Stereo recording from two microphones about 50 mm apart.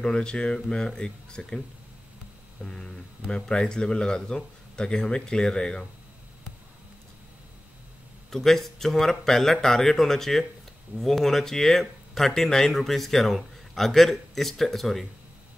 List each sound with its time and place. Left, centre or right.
0.0 s speech: centre
2.6 s speech: centre
8.3 s speech: centre